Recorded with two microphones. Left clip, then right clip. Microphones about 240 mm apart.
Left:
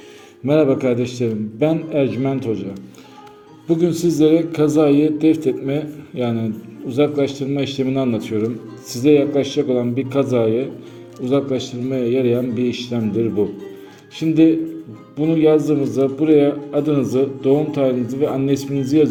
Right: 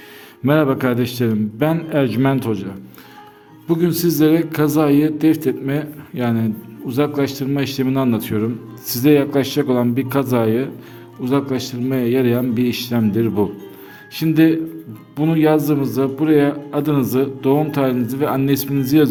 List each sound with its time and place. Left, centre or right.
0.4 s a man's voice: right
3.7 s a man's voice: right